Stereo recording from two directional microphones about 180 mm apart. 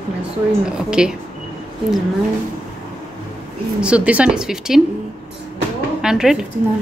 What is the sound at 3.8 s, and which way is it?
Speech, 5° right (ahead or behind).